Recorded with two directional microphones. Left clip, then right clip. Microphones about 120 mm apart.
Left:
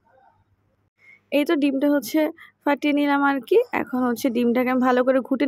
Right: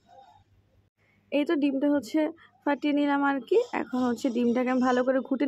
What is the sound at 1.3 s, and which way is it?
Speech, 35° left (ahead or behind).